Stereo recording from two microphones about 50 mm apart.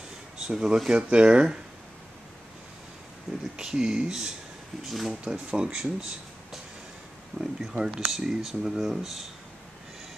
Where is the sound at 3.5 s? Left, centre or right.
Centre.